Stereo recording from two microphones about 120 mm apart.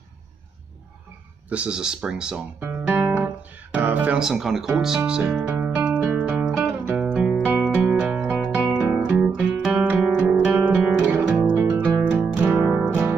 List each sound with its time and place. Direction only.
1.5 s speech: 10° right (ahead or behind)
2.6 s guitar: 15° right (ahead or behind)
3.7 s music: 15° right (ahead or behind)
8.9 s guitar: 10° right (ahead or behind)
10.3 s music: 10° right (ahead or behind)